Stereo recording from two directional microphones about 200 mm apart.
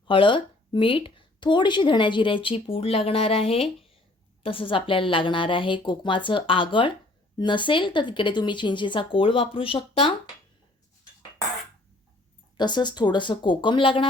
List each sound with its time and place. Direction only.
0.1 s a woman's voice: 25° left (ahead or behind)
12.5 s a woman's voice: 20° left (ahead or behind)